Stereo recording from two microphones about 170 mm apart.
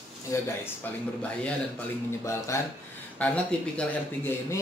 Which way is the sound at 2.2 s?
15° left (ahead or behind).